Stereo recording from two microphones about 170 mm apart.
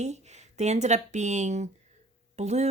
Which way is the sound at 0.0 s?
40° right (ahead or behind).